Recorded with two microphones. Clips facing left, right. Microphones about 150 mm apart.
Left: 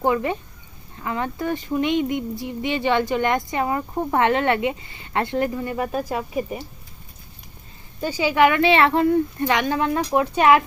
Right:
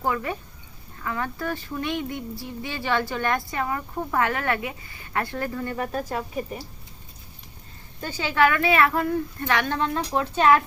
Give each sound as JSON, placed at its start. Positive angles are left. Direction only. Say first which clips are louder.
{"t": 0.0, "sound": "speech", "louder": "left 6 dB", "side_deg": 20}
{"t": 8.0, "sound": "speech", "louder": "left 4 dB", "side_deg": 10}